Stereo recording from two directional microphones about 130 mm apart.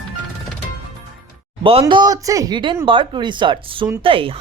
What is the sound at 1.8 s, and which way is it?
Speech, 30° right (ahead or behind).